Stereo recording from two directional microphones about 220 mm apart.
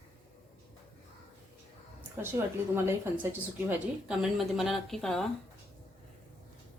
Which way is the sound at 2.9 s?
10° right (ahead or behind).